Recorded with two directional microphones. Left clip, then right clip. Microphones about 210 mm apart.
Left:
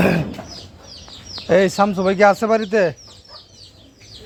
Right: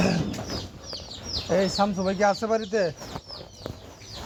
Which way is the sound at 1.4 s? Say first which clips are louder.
Left 9 dB; 50° left (ahead or behind).